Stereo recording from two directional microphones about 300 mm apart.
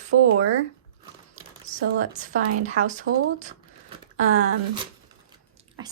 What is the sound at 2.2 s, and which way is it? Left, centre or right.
Speech, right.